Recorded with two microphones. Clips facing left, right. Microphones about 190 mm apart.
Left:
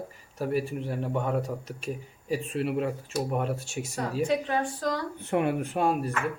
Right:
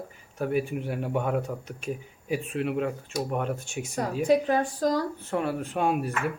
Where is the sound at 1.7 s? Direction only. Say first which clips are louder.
Right 1 dB; 5° left (ahead or behind).